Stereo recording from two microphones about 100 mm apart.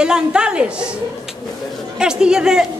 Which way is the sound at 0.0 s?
10° right (ahead or behind).